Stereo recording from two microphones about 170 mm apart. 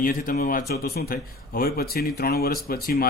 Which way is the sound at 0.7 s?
65° left (ahead or behind).